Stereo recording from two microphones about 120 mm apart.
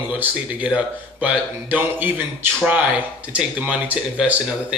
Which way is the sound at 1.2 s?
10° right (ahead or behind).